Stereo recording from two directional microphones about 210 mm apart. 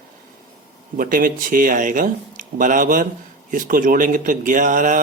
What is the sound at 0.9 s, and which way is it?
Speech, 40° right (ahead or behind).